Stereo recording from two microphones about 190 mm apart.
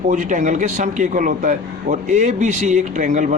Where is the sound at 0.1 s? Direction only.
40° right (ahead or behind).